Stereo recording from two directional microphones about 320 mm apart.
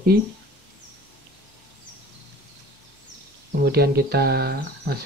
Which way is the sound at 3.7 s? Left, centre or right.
Right.